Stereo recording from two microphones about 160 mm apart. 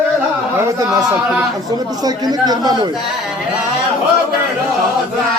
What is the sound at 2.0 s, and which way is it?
Speech, 25° right (ahead or behind).